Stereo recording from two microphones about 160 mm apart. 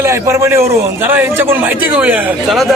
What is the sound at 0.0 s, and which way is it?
A man's voice, 20° right (ahead or behind).